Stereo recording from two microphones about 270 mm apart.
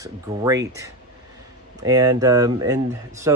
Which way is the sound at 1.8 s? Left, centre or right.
Centre.